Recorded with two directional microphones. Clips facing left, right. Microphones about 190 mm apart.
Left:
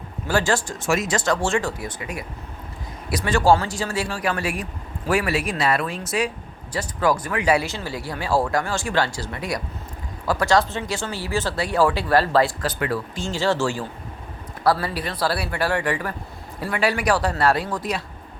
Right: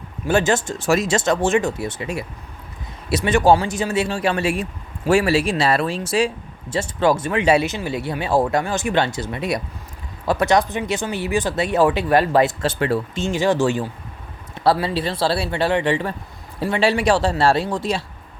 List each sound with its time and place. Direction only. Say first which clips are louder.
0.3 s speech: right 4 dB; 20° right (ahead or behind)
0.8 s speech: right 4 dB; 35° right (ahead or behind)